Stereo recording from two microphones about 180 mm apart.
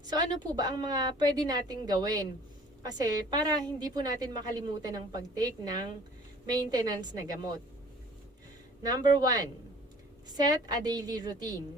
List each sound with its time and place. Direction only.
0.2 s a woman's voice: 25° right (ahead or behind)
8.8 s a woman's voice: 20° right (ahead or behind)